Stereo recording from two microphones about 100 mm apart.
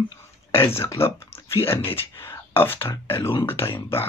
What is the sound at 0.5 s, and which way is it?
Speech, 25° left (ahead or behind).